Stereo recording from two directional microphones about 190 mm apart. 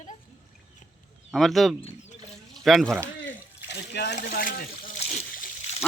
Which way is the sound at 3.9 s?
60° left (ahead or behind).